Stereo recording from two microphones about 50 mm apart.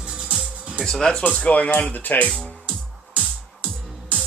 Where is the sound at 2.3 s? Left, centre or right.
Centre.